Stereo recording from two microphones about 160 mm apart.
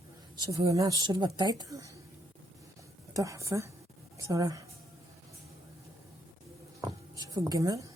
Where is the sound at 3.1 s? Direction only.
20° right (ahead or behind).